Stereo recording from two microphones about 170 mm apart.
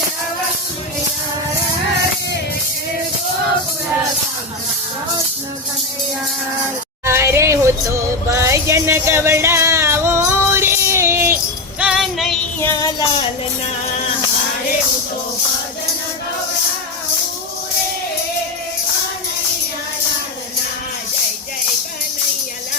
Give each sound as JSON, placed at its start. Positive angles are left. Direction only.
{"t": 7.0, "sound": "music", "side_deg": -15}
{"t": 11.8, "sound": "music", "side_deg": -5}
{"t": 12.5, "sound": "child singing", "side_deg": 15}